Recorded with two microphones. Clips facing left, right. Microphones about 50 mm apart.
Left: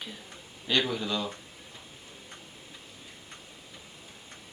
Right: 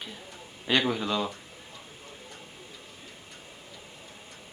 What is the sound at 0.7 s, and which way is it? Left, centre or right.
Speech, right.